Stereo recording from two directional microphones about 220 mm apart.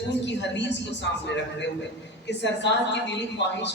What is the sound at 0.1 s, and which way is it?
Speech, 55° left (ahead or behind).